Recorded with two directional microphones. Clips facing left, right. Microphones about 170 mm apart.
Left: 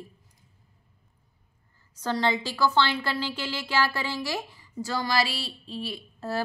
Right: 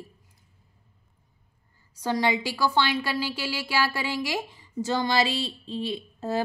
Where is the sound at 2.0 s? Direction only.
15° right (ahead or behind).